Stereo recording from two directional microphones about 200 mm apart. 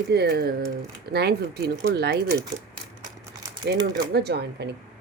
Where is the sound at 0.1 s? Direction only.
50° right (ahead or behind).